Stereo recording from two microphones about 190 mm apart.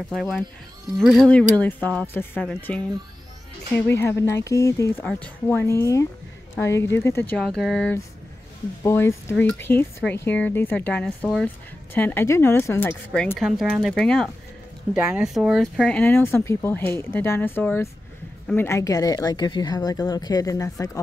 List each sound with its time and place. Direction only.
0.1 s speech: centre (ahead or behind)
15.0 s speech: 10° right (ahead or behind); by 21.0 s 15° left (ahead or behind)